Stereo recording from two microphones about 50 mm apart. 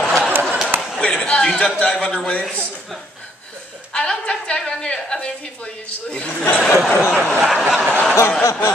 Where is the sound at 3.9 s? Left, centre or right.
Centre.